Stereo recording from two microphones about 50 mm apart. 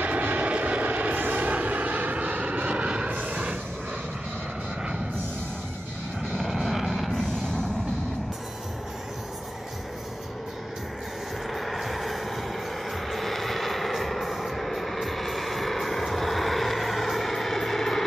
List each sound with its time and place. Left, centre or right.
0.0 s vehicle: right
3.1 s a sound: right
6.3 s vehicle: centre
11.5 s vehicle: centre